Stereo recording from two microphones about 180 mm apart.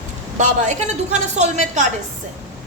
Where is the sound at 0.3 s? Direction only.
40° right (ahead or behind).